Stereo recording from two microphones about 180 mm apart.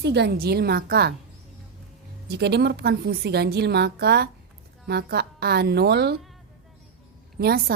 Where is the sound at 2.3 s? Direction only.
65° right (ahead or behind).